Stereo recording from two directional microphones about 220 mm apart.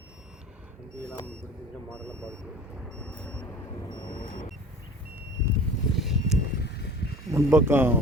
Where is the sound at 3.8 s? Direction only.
20° left (ahead or behind).